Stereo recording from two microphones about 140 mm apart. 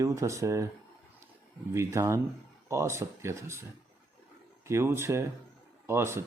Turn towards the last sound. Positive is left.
turn(degrees=-20)  # may be behind; listen again after turning